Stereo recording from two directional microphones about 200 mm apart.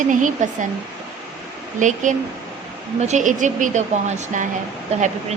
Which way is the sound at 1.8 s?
40° right (ahead or behind).